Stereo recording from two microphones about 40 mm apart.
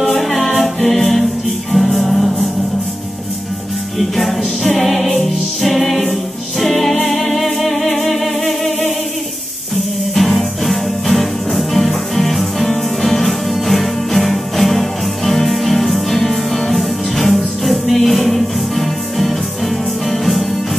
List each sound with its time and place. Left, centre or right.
0.0 s music: centre
4.2 s music: centre
10.1 s music: centre